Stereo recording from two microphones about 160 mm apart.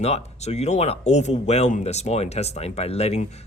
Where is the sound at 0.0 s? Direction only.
40° left (ahead or behind).